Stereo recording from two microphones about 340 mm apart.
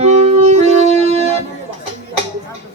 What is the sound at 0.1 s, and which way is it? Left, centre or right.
Music, centre.